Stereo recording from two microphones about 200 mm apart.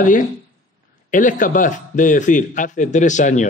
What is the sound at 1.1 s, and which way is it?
Speech, 40° left (ahead or behind).